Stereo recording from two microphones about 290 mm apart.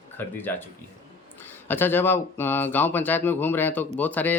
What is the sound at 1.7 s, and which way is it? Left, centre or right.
Speech, centre.